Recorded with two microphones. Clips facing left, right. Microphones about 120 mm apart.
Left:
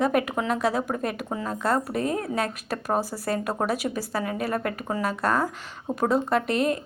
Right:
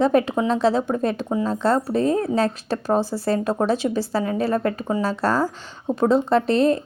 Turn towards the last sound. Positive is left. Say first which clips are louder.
# right 6 dB
turn(degrees=-30)  # may be behind; listen again after turning